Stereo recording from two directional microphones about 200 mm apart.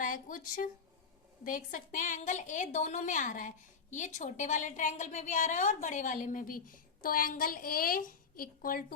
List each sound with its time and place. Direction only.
0.0 s a woman's voice: 40° left (ahead or behind)